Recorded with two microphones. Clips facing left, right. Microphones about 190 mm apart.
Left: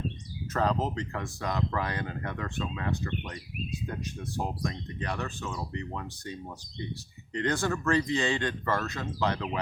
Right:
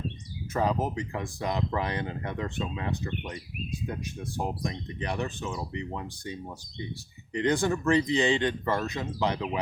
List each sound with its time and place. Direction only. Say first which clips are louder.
0.5 s speech: right 1 dB; 10° right (ahead or behind)